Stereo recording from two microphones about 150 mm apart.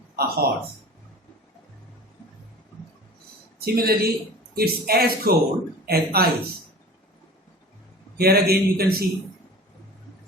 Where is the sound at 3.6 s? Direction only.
90° right.